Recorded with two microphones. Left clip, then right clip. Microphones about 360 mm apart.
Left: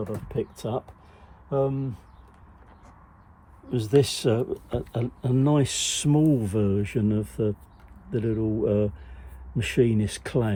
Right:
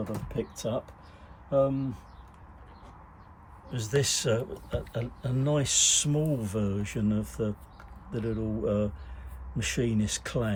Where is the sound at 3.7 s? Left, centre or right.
Centre.